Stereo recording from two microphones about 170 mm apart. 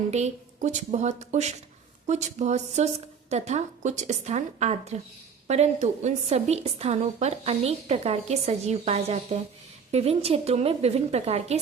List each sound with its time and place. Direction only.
0.1 s a woman's voice: 40° right (ahead or behind)